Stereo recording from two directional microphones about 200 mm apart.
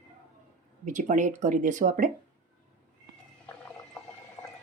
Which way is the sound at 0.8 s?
40° right (ahead or behind).